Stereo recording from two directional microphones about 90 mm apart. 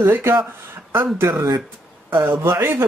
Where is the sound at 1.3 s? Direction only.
40° right (ahead or behind).